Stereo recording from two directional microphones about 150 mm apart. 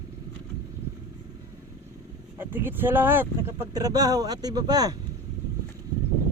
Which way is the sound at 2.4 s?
15° right (ahead or behind).